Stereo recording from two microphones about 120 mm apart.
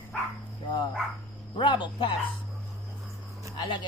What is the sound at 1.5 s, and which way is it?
Speech, 40° left (ahead or behind).